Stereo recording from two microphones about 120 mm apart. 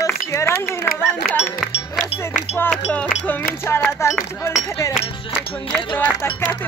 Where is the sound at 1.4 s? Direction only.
Centre (ahead or behind).